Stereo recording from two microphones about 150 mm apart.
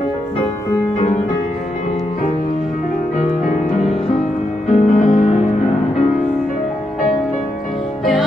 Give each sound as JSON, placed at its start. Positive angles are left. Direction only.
{"t": 4.6, "sound": "music", "side_deg": 50}
{"t": 8.0, "sound": "music", "side_deg": 0}